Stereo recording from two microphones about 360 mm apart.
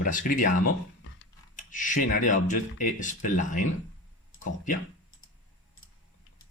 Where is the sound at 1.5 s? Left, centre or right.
Left.